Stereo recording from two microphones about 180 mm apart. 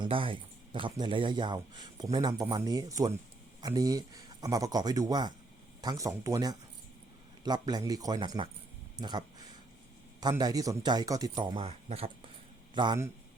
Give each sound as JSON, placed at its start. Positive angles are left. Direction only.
{"t": 0.0, "sound": "speech", "side_deg": -30}